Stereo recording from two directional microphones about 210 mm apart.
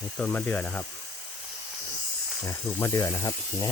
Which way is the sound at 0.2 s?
5° left (ahead or behind).